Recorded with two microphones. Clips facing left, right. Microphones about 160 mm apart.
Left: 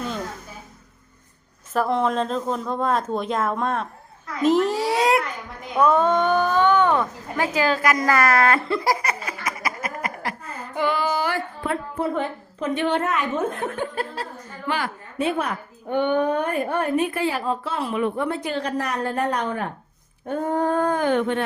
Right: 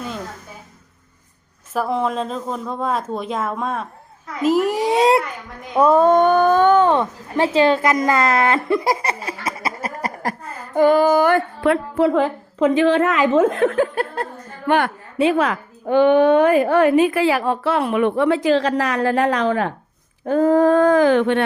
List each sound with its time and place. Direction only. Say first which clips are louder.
1.7 s speech: even; 5° right (ahead or behind)
4.4 s a sound: right 2 dB; 10° right (ahead or behind); by 5.2 s 25° right (ahead or behind)
5.7 s speech: right 5 dB; 35° right (ahead or behind)
10.8 s a woman's voice: right 10 dB; 45° right (ahead or behind); by 21.4 s 85° right